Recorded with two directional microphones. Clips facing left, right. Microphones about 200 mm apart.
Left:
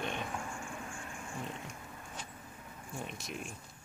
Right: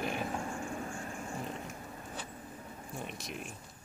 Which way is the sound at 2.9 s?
Centre (ahead or behind).